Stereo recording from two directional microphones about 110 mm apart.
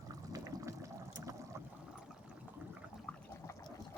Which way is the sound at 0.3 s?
30° right (ahead or behind).